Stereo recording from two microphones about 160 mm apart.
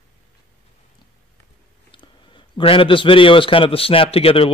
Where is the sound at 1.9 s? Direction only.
30° left (ahead or behind).